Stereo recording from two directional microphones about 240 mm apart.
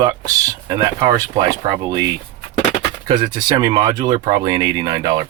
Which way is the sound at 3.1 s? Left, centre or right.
Centre.